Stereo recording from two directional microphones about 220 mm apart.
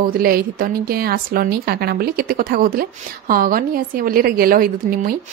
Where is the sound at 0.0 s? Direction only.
40° right (ahead or behind).